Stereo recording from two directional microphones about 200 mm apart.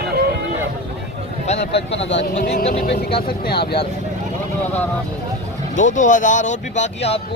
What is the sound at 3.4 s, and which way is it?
Speech, 55° left (ahead or behind).